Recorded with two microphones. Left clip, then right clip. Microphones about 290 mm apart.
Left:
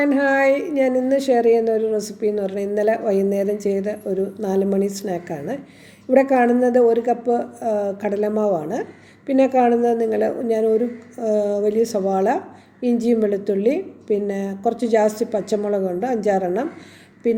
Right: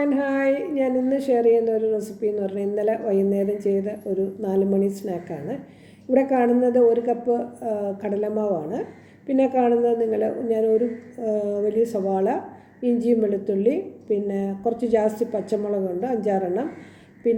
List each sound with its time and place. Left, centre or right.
0.0 s a woman's voice: left